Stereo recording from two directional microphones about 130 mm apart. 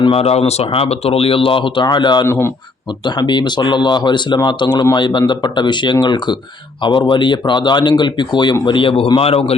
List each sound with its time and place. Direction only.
0.0 s speech: 50° left (ahead or behind)
2.2 s a man's voice: 20° left (ahead or behind)
3.0 s speech: 35° left (ahead or behind)